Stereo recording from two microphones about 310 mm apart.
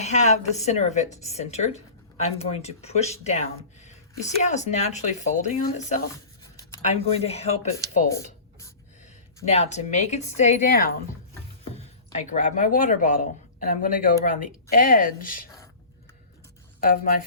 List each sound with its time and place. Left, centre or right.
0.0 s speech: left
6.4 s writing: centre
6.8 s speech: centre
8.1 s writing: centre
9.5 s speech: left
16.8 s speech: left